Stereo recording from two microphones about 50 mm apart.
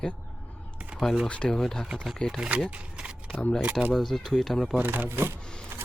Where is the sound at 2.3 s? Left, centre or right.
Right.